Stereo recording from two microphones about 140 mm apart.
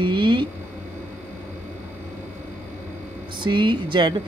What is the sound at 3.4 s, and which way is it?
Speech, 35° right (ahead or behind).